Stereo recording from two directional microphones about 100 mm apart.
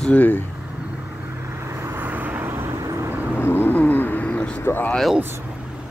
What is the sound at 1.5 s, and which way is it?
Vehicle, 30° right (ahead or behind).